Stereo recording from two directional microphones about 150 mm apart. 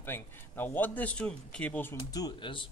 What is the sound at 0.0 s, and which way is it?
Speech, 15° left (ahead or behind).